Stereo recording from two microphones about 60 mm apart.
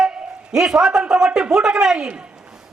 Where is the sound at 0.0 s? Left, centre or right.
Centre.